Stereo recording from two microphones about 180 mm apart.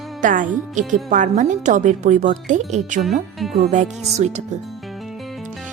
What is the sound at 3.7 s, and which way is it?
Speech, 40° right (ahead or behind).